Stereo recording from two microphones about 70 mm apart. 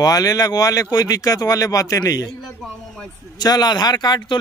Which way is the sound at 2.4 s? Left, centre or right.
Centre.